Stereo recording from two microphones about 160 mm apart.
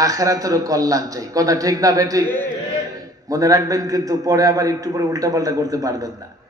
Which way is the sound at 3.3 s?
20° right (ahead or behind).